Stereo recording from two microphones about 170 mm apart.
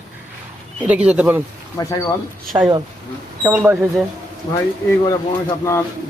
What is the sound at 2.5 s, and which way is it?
Speech, 25° right (ahead or behind).